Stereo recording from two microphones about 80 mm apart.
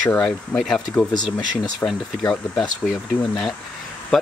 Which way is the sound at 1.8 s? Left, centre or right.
Left.